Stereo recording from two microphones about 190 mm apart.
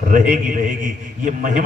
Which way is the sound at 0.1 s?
45° right (ahead or behind).